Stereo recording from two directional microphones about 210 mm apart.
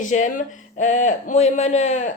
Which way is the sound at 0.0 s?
35° left (ahead or behind).